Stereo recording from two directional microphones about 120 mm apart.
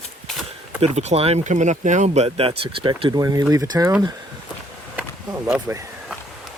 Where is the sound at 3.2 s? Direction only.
30° right (ahead or behind).